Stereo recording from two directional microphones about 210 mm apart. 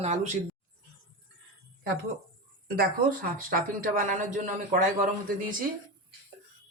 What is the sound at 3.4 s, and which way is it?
Speech, 40° right (ahead or behind).